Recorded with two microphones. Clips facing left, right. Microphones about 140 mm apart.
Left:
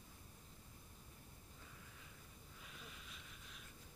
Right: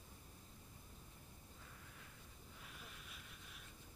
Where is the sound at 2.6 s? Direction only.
Centre (ahead or behind).